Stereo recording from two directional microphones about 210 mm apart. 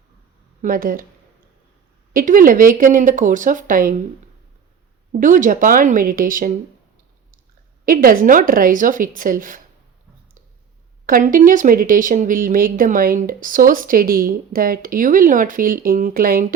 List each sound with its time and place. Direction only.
0.6 s speech: 40° right (ahead or behind)
2.1 s speech: 40° right (ahead or behind)
5.2 s speech: 40° right (ahead or behind)
7.9 s speech: 45° right (ahead or behind)
11.0 s speech: 40° right (ahead or behind)